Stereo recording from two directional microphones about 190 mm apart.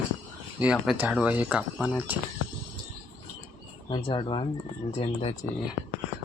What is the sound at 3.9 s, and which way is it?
Speech, 25° left (ahead or behind).